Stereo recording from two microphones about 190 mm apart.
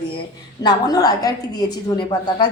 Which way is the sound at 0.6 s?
20° left (ahead or behind).